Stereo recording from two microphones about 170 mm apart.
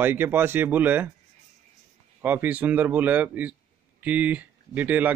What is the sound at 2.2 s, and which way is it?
Speech, 10° right (ahead or behind).